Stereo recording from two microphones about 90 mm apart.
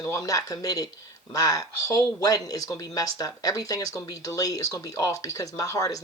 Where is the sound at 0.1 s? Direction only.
40° left (ahead or behind).